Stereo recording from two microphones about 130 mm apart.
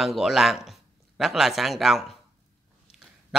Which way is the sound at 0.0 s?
Centre (ahead or behind).